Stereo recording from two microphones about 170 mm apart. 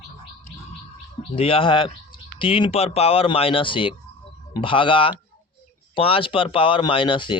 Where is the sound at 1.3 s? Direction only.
35° left (ahead or behind).